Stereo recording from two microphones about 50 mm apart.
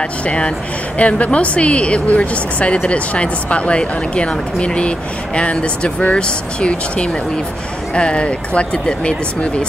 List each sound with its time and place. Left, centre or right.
0.9 s a woman's voice: left